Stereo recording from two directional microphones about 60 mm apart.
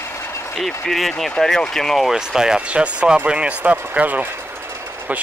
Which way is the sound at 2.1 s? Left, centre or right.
Centre.